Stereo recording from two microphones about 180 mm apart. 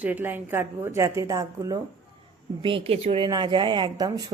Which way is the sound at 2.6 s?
30° right (ahead or behind).